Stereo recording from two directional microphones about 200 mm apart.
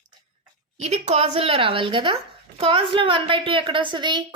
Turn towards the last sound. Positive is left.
turn(degrees=-25)  # may be behind; listen again after turning